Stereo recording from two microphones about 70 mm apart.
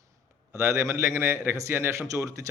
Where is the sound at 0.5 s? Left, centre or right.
Right.